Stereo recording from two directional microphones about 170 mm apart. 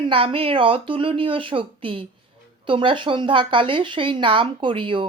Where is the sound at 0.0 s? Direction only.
35° right (ahead or behind).